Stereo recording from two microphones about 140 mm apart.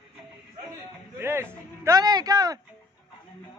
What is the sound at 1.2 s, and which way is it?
A man's voice, 15° right (ahead or behind).